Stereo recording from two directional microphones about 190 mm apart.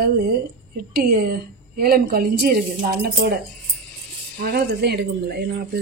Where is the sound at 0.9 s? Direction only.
55° right (ahead or behind).